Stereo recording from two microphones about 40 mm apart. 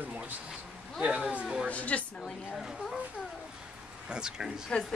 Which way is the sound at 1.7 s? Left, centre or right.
Left.